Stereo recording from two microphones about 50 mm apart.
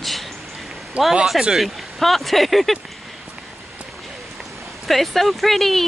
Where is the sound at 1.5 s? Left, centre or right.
Centre.